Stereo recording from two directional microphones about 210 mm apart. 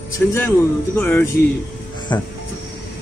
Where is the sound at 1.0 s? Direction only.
10° left (ahead or behind).